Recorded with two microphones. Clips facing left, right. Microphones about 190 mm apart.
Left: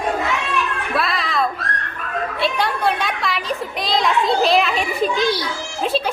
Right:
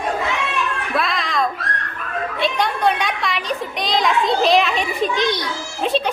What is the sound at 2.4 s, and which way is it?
A child's voice, 5° left (ahead or behind).